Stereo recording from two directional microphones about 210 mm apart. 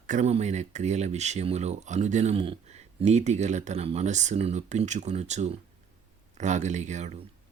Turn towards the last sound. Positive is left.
turn(degrees=-35)  # may be behind; listen again after turning